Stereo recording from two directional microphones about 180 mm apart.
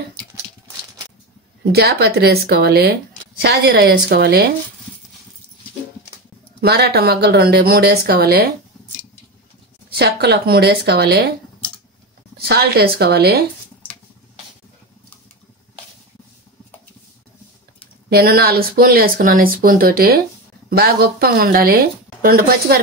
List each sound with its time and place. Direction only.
1.7 s speech: 60° right (ahead or behind)
6.6 s speech: 65° right (ahead or behind)
9.9 s speech: 65° right (ahead or behind)
12.4 s speech: 60° right (ahead or behind)
18.1 s speech: 55° right (ahead or behind)